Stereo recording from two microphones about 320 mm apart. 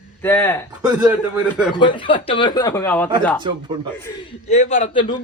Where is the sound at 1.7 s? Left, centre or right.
Centre.